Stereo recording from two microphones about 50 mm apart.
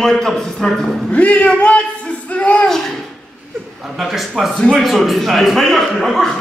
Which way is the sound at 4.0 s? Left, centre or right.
Centre.